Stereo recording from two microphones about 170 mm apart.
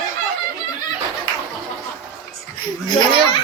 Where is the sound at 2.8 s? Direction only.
25° left (ahead or behind).